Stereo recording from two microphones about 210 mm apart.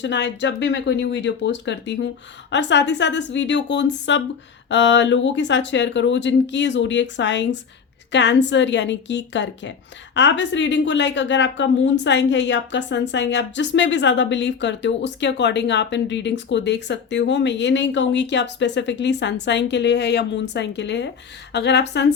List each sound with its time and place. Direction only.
0.0 s a woman's voice: 60° left (ahead or behind)